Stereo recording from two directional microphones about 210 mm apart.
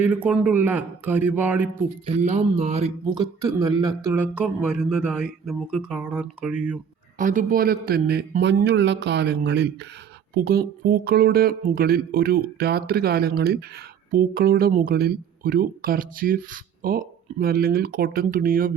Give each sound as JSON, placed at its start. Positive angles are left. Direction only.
{"t": 0.0, "sound": "a man's voice", "side_deg": -10}
{"t": 2.0, "sound": "speech", "side_deg": -30}
{"t": 3.2, "sound": "speech", "side_deg": -15}
{"t": 7.2, "sound": "speech", "side_deg": -40}